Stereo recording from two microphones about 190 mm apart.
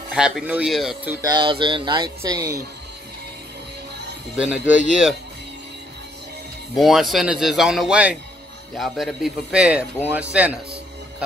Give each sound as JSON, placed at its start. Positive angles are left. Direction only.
{"t": 0.1, "sound": "speech", "side_deg": -5}
{"t": 1.3, "sound": "speech", "side_deg": -25}
{"t": 4.4, "sound": "speech", "side_deg": -5}
{"t": 6.7, "sound": "speech", "side_deg": 0}
{"t": 10.3, "sound": "music", "side_deg": -5}